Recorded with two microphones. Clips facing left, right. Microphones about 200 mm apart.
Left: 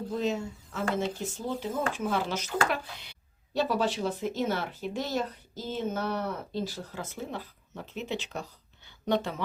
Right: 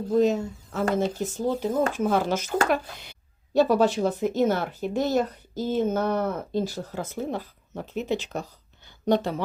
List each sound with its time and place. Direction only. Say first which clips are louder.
0.1 s speech: right 10 dB; 40° right (ahead or behind)